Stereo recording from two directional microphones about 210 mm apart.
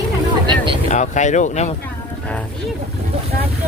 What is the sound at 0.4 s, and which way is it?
Vehicle, 25° right (ahead or behind).